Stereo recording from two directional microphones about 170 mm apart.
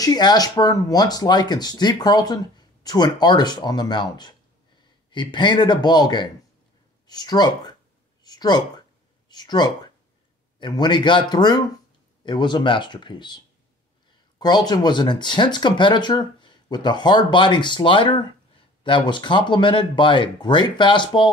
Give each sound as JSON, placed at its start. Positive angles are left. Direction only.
{"t": 0.0, "sound": "speech", "side_deg": 25}
{"t": 8.2, "sound": "a sound", "side_deg": 25}
{"t": 9.3, "sound": "speech", "side_deg": 25}
{"t": 14.4, "sound": "speech", "side_deg": 25}